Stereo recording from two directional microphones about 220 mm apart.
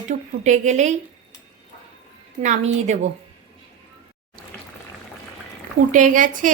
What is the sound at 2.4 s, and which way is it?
Speech, 35° right (ahead or behind).